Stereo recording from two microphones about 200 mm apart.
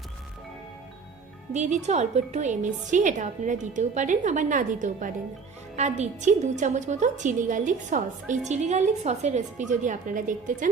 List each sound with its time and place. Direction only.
1.5 s a woman's voice: 35° right (ahead or behind)